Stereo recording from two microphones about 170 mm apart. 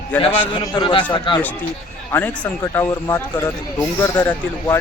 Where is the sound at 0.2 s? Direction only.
30° left (ahead or behind).